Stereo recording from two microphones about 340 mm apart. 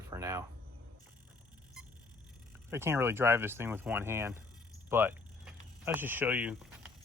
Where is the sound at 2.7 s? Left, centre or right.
Centre.